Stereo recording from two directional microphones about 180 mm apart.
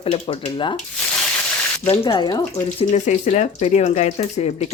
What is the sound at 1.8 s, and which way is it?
Speech, 35° left (ahead or behind).